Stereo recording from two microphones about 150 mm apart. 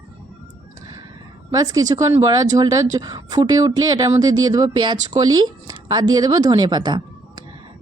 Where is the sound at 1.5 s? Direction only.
25° right (ahead or behind).